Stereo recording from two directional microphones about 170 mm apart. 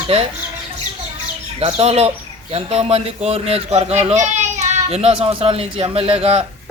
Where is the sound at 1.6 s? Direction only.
35° right (ahead or behind).